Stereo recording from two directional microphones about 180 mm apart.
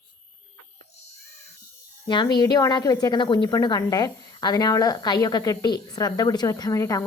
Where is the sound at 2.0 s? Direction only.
25° left (ahead or behind).